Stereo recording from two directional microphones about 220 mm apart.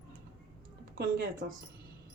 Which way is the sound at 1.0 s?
40° right (ahead or behind).